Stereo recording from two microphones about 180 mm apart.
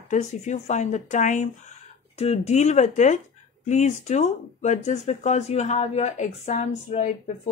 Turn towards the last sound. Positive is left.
turn(degrees=40)  # may be behind; listen again after turning